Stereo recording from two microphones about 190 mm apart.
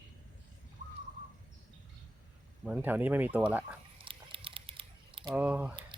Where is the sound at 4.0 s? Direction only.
30° right (ahead or behind).